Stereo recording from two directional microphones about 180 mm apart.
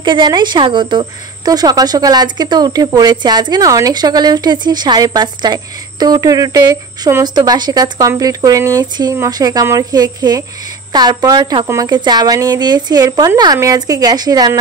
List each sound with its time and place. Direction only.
0.0 s a woman's voice: 25° right (ahead or behind)